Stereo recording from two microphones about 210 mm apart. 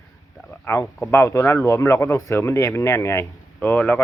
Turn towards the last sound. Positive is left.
turn(degrees=10)  # may be behind; listen again after turning